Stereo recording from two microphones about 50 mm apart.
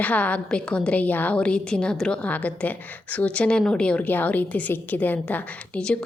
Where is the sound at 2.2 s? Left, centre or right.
Left.